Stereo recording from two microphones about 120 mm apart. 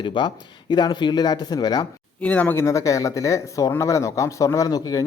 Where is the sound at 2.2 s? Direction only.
10° left (ahead or behind).